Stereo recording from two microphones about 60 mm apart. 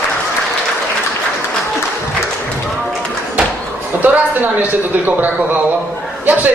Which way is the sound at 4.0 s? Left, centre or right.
Right.